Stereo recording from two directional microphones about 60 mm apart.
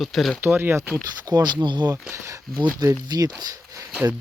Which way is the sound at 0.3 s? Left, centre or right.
Right.